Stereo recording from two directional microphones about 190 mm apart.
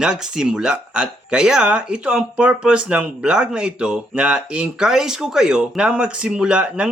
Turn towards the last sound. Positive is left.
turn(degrees=-5)  # may be behind; listen again after turning